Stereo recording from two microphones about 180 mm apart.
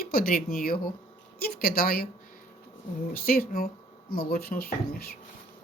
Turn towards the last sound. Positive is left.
turn(degrees=60)  # may be behind; listen again after turning